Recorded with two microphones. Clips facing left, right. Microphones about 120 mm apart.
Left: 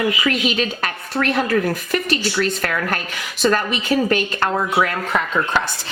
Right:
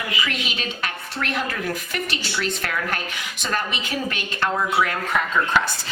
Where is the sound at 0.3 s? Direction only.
40° left (ahead or behind).